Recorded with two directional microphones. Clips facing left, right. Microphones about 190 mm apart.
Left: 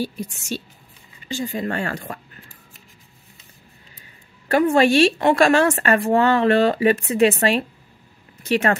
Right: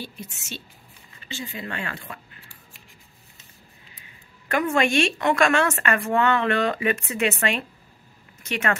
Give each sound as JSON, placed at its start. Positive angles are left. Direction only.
{"t": 0.0, "sound": "speech", "side_deg": 45}
{"t": 4.5, "sound": "speech", "side_deg": 35}